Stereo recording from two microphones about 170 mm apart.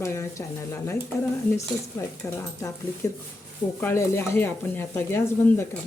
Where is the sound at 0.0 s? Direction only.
15° left (ahead or behind).